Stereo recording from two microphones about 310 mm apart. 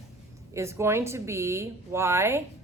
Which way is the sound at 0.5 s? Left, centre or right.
Centre.